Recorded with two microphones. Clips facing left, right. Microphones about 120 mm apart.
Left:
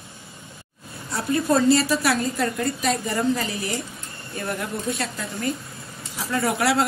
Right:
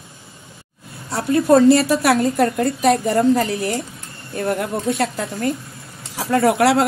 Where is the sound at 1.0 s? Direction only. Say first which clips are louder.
Right 7 dB; 65° right (ahead or behind).